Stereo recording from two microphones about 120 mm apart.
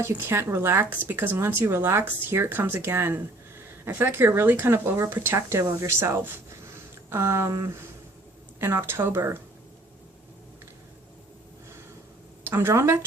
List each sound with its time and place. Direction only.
0.0 s speech: 20° right (ahead or behind)
8.6 s speech: 20° right (ahead or behind)
12.5 s speech: 20° right (ahead or behind)